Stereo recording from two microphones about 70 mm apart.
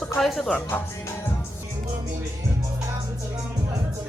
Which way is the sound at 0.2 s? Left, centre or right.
Centre.